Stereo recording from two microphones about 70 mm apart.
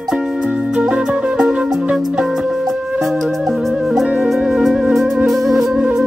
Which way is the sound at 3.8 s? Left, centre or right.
Centre.